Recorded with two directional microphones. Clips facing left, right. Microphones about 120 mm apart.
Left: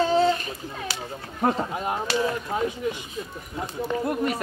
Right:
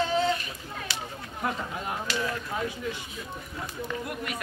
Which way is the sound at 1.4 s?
40° left (ahead or behind).